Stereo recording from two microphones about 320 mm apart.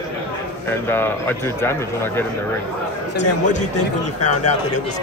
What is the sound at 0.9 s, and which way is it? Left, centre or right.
A man's voice, centre.